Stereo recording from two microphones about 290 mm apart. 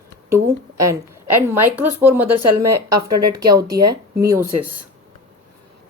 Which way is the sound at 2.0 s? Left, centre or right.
Centre.